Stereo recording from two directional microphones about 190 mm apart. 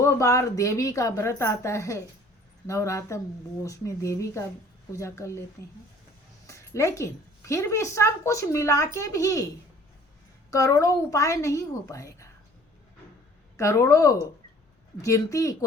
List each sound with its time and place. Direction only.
0.0 s a woman's voice: 15° left (ahead or behind)
6.5 s a woman's voice: 15° left (ahead or behind)
10.5 s a woman's voice: 15° left (ahead or behind)
13.6 s a woman's voice: 15° left (ahead or behind)